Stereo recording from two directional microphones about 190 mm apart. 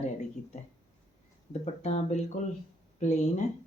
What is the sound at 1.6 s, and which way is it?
Speech, 35° left (ahead or behind).